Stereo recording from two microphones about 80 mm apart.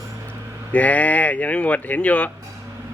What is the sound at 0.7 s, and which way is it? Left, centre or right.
Speech, centre.